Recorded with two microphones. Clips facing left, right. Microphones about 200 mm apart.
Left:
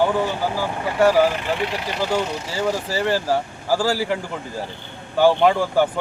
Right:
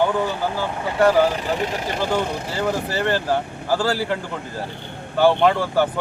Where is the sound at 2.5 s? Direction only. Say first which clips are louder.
Even; 10° left (ahead or behind).